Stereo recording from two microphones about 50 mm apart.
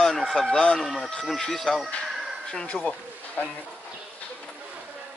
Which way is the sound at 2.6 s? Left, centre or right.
Left.